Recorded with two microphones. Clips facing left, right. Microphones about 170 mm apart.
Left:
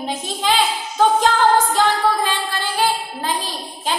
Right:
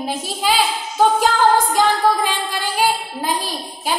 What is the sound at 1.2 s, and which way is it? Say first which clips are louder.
Singing: even; 10° right (ahead or behind).